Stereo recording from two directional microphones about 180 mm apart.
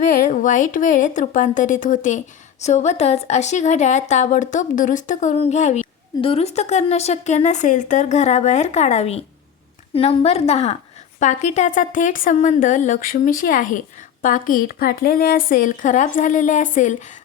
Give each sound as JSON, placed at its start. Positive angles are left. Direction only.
{"t": 0.3, "sound": "a woman's voice", "side_deg": 45}